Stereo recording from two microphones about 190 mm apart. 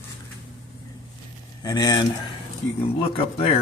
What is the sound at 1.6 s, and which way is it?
Speech, 20° left (ahead or behind).